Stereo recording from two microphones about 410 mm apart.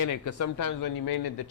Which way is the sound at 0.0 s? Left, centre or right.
Left.